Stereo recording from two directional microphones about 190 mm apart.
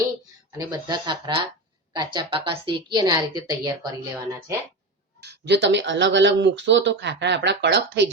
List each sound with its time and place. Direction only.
0.5 s a woman's voice: 20° right (ahead or behind)
5.2 s speech: 60° right (ahead or behind)